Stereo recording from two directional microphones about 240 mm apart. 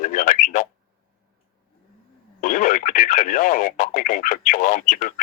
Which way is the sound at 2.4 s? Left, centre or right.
Left.